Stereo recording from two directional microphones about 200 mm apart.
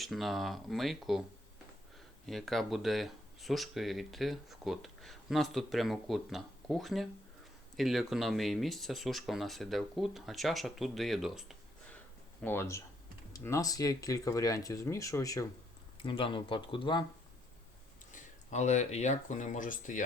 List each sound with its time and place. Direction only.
0.0 s speech: centre (ahead or behind)
2.2 s speech: centre (ahead or behind)
12.4 s speech: 10° left (ahead or behind)
16.0 s speech: 25° left (ahead or behind)
18.1 s speech: 35° left (ahead or behind)